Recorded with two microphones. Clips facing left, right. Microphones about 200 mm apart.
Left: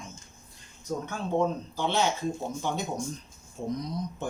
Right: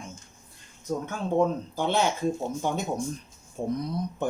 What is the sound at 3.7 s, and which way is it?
Speech, 60° right (ahead or behind).